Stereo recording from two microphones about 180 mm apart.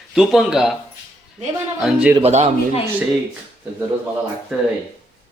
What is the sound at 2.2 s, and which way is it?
Speech, 35° right (ahead or behind).